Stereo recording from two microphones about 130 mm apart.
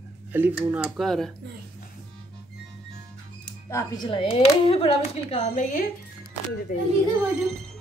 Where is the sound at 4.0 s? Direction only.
45° left (ahead or behind); by 6.8 s 90° left.